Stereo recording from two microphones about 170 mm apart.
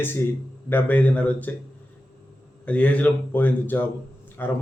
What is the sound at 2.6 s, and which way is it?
Speech, 10° left (ahead or behind).